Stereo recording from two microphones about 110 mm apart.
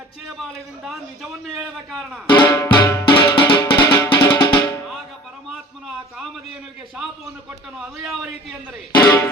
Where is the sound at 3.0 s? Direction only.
50° left (ahead or behind).